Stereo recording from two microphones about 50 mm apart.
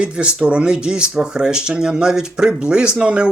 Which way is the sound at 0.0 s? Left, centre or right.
Right.